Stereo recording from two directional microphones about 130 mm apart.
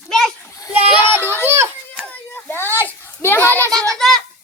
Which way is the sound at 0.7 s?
15° right (ahead or behind).